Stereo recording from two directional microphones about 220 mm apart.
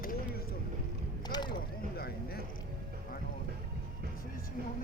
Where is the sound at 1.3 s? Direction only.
20° left (ahead or behind).